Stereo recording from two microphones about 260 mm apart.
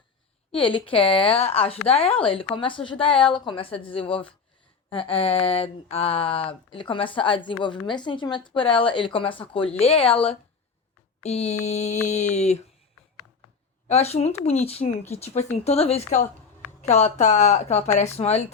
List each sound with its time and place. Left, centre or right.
0.5 s speech: centre
11.2 s speech: left
13.8 s speech: left